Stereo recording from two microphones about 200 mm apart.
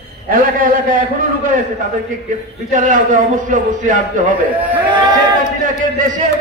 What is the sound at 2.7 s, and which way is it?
A man's voice, 40° right (ahead or behind).